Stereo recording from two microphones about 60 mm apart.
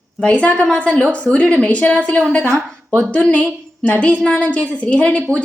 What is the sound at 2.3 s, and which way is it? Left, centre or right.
Speech, left.